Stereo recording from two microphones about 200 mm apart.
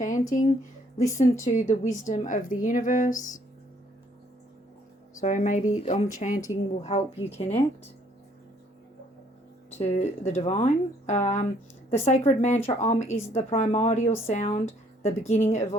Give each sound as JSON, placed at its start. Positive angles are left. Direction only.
{"t": 0.0, "sound": "a woman's voice", "side_deg": 40}
{"t": 5.2, "sound": "a woman's voice", "side_deg": 40}
{"t": 9.7, "sound": "a woman's voice", "side_deg": 35}